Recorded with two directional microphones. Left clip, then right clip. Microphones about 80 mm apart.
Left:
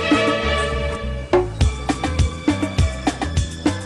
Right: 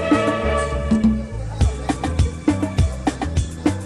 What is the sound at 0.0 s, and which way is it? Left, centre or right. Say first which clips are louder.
Music: left 1 dB; left.